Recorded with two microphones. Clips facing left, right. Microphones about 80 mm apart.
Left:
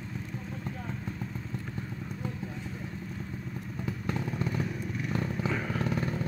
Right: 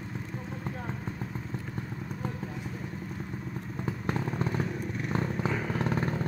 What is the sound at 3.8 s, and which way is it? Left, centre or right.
Vehicle, right.